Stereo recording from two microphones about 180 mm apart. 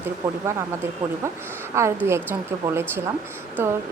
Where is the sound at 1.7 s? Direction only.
15° right (ahead or behind).